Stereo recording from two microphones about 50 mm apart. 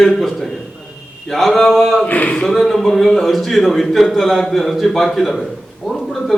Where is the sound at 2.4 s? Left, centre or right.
Centre.